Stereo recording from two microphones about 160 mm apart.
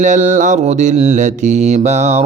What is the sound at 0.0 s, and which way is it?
A man's voice, 50° right (ahead or behind).